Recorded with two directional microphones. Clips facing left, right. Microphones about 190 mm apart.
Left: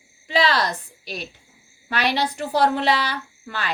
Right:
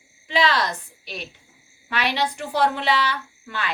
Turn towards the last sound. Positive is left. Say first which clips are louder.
# even
turn(degrees=40)  # may be behind; listen again after turning